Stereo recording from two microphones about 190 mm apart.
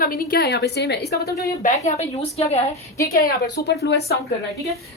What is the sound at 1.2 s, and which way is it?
Speech, 15° left (ahead or behind).